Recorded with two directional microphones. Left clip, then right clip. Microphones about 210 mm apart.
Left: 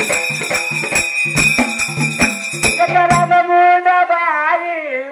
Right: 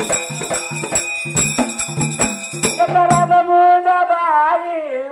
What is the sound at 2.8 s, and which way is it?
Music, 50° right (ahead or behind).